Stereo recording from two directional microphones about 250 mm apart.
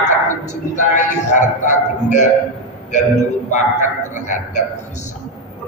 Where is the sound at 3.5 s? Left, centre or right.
Left.